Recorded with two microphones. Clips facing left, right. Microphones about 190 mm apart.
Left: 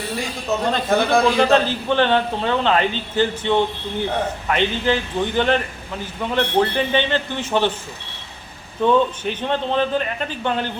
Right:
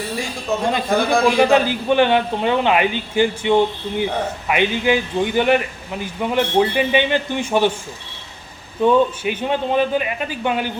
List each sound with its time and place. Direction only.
0.9 s a man's voice: centre (ahead or behind)
1.4 s a man's voice: 10° right (ahead or behind)
8.8 s a man's voice: 10° right (ahead or behind)